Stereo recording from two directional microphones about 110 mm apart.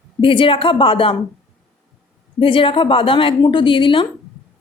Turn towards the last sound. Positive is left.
turn(degrees=50)  # may be behind; listen again after turning